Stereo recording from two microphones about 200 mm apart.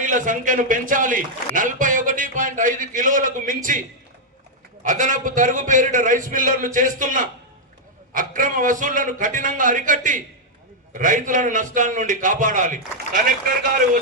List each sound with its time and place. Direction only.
0.0 s a man's voice: 40° right (ahead or behind)